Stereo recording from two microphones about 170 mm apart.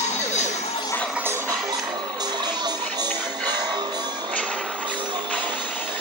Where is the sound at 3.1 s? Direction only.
10° left (ahead or behind).